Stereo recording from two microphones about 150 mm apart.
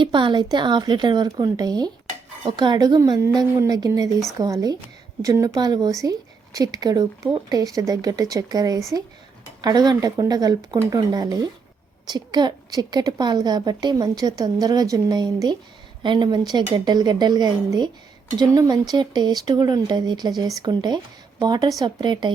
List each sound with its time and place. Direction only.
0.0 s a woman's voice: 30° right (ahead or behind)